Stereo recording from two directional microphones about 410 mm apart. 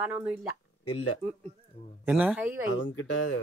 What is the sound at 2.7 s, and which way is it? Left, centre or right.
Speech, left.